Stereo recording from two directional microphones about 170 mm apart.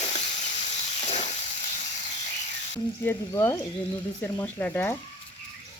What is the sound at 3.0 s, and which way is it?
Speech, 15° left (ahead or behind).